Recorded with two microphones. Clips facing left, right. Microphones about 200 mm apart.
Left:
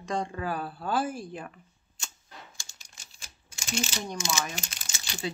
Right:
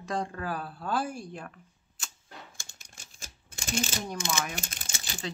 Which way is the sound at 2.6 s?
50° right (ahead or behind).